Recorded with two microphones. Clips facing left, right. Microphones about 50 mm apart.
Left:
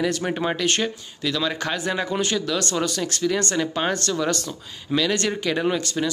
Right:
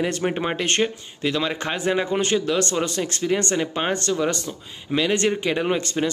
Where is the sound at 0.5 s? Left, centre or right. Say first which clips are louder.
Right 1 dB; right.